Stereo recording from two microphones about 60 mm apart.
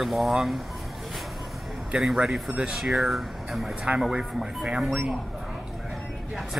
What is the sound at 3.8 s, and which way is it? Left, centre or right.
Speech, centre.